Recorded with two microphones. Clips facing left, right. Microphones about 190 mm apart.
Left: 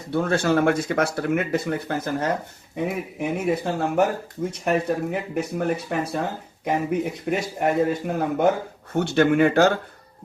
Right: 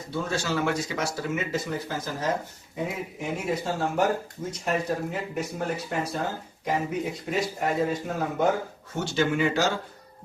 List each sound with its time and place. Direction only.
0.1 s speech: 60° left (ahead or behind)